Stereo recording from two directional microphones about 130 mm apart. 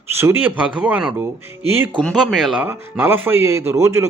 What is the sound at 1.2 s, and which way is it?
Speech, 20° right (ahead or behind).